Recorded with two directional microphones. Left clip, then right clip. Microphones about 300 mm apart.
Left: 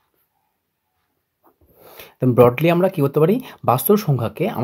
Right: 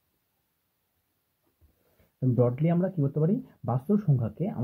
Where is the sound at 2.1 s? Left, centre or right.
Left.